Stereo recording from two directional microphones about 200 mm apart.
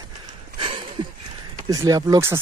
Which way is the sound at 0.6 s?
25° right (ahead or behind).